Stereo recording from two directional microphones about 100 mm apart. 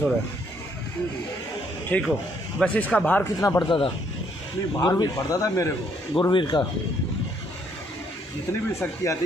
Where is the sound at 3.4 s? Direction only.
30° left (ahead or behind).